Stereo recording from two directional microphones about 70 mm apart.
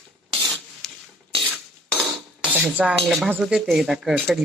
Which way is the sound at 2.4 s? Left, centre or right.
Centre.